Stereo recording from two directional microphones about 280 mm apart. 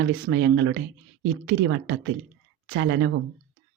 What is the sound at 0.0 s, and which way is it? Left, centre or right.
Speech, right.